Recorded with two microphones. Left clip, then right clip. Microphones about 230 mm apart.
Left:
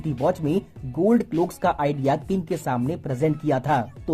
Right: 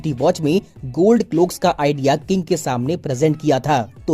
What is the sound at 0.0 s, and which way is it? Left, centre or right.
Speech, right.